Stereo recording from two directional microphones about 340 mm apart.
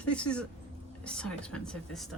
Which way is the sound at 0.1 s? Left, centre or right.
Centre.